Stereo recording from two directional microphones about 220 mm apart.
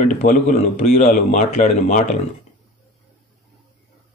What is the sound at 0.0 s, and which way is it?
Speech, 35° left (ahead or behind).